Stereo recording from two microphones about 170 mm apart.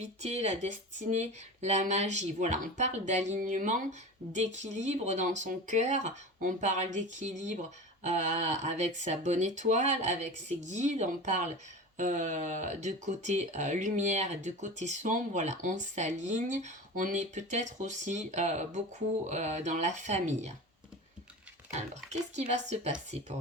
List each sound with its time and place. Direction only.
0.0 s speech: 40° right (ahead or behind)
22.4 s a woman's voice: 40° right (ahead or behind)